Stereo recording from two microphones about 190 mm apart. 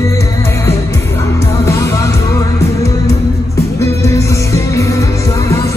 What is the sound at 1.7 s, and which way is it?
Music, 15° left (ahead or behind).